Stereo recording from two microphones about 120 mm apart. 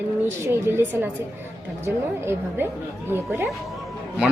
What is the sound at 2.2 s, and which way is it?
A woman's voice, 20° right (ahead or behind).